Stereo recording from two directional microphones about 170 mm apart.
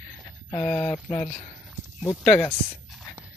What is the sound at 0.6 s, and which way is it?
Speech, 5° left (ahead or behind).